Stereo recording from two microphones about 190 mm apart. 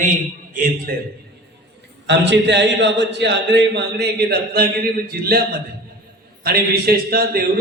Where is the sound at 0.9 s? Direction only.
50° right (ahead or behind).